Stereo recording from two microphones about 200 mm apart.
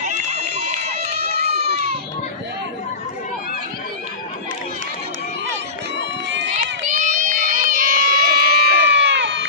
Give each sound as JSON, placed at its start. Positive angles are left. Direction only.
{"t": 0.2, "sound": "run", "side_deg": -30}
{"t": 6.6, "sound": "crowd", "side_deg": -40}